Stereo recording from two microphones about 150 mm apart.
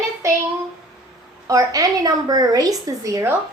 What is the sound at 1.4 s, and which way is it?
A woman's voice, 25° right (ahead or behind).